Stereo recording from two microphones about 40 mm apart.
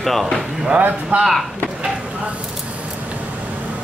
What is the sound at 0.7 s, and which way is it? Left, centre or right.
Speech, right.